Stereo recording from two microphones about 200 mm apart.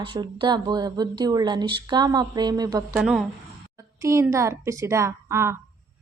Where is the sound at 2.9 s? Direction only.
5° right (ahead or behind).